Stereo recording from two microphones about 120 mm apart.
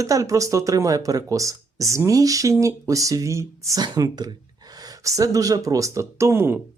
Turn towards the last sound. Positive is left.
turn(degrees=-20)  # may be behind; listen again after turning